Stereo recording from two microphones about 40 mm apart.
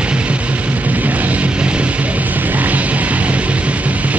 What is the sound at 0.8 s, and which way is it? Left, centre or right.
Music, right.